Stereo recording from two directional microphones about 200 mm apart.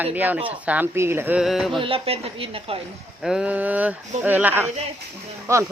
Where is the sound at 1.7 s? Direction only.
25° right (ahead or behind).